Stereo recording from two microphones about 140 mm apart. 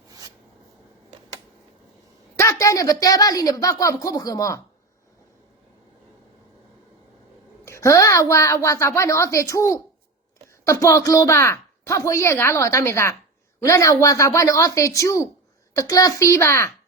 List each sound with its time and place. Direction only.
2.3 s a woman's voice: 20° left (ahead or behind)
7.6 s a woman's voice: 20° left (ahead or behind)